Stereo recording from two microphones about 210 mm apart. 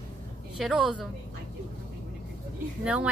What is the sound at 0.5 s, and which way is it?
Speech, centre (ahead or behind).